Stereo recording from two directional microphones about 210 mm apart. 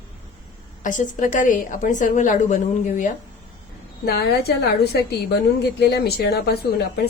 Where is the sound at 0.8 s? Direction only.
40° left (ahead or behind).